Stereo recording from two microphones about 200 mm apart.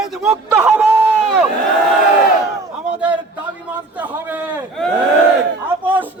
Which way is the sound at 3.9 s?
10° right (ahead or behind).